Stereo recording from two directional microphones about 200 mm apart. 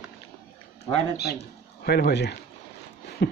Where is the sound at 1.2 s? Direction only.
55° left (ahead or behind).